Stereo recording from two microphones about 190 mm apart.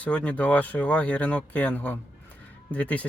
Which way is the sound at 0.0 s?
5° left (ahead or behind).